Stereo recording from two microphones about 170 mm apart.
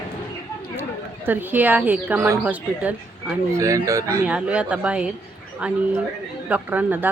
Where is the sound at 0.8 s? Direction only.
10° right (ahead or behind).